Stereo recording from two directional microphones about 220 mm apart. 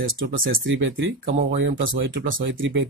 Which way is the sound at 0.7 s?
60° right (ahead or behind).